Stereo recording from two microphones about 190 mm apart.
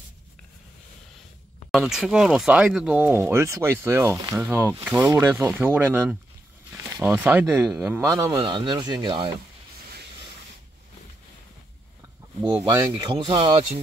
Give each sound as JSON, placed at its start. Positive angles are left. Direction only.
{"t": 1.7, "sound": "speech", "side_deg": 0}
{"t": 8.2, "sound": "speech", "side_deg": -20}
{"t": 12.6, "sound": "speech", "side_deg": -20}